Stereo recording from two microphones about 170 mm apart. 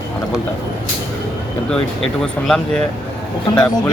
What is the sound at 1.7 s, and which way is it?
Speech, 5° left (ahead or behind).